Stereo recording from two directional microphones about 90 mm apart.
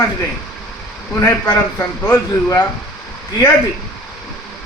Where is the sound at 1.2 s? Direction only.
30° left (ahead or behind).